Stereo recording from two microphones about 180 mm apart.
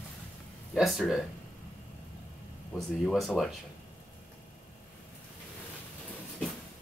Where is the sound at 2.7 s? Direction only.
Centre (ahead or behind).